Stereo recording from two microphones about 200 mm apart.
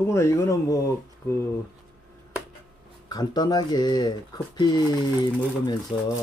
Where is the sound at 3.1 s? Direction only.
20° left (ahead or behind).